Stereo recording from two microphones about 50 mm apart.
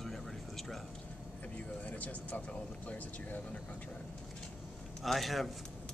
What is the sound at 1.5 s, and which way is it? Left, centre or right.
Speech, left.